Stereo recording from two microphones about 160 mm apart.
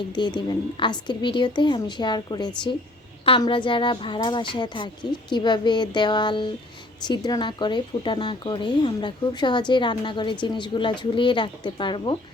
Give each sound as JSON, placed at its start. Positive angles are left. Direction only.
{"t": 0.1, "sound": "a woman's voice", "side_deg": 30}